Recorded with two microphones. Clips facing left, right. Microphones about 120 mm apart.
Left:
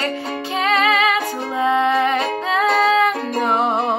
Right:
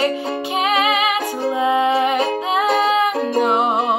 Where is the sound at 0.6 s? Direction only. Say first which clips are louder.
Left 1 dB; 15° right (ahead or behind).